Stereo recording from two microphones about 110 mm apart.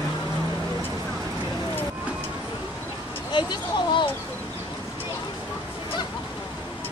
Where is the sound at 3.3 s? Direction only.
45° left (ahead or behind).